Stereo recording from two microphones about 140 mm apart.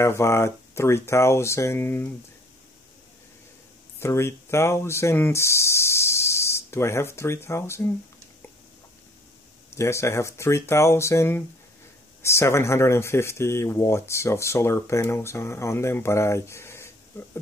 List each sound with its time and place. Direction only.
0.0 s speech: 20° left (ahead or behind)
4.0 s speech: 20° left (ahead or behind)
9.8 s speech: 20° left (ahead or behind)